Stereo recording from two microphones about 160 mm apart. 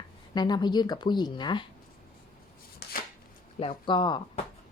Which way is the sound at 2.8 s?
80° left.